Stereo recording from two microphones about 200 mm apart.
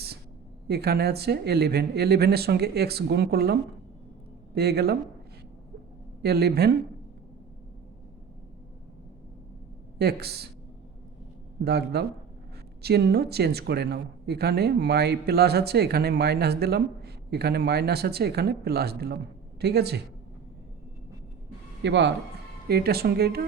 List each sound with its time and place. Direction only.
0.7 s speech: 50° right (ahead or behind)
6.2 s speech: 50° right (ahead or behind)
10.0 s speech: 55° right (ahead or behind)
11.6 s speech: 55° right (ahead or behind)
21.8 s speech: 60° right (ahead or behind)
22.7 s speech: 50° right (ahead or behind)